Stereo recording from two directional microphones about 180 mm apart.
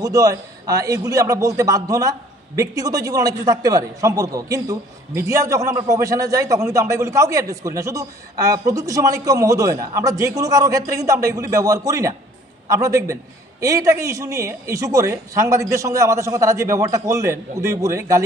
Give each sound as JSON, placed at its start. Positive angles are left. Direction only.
{"t": 0.0, "sound": "a man's voice", "side_deg": -20}